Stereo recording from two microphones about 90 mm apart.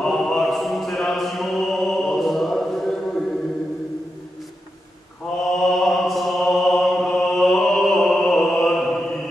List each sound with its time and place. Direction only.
0.0 s music: 5° left (ahead or behind)
5.5 s music: 5° left (ahead or behind)